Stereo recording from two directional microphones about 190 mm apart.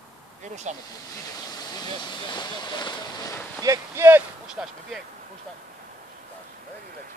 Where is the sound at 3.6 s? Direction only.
15° right (ahead or behind).